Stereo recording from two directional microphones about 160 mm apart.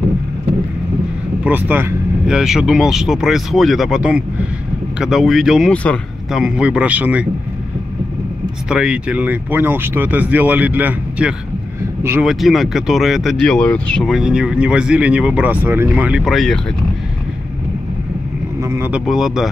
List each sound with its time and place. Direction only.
1.4 s speech: 10° right (ahead or behind)
8.6 s speech: 5° right (ahead or behind)
12.3 s speech: centre (ahead or behind)
18.6 s vehicle: 20° right (ahead or behind)
18.9 s speech: 5° right (ahead or behind)